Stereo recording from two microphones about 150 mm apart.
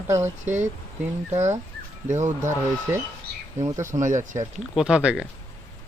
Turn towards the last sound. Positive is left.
turn(degrees=-5)  # may be behind; listen again after turning